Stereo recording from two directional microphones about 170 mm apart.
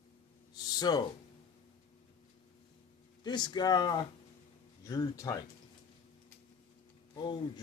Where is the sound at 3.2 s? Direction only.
25° left (ahead or behind).